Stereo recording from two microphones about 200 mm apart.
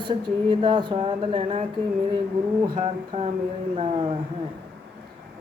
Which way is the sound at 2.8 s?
30° right (ahead or behind).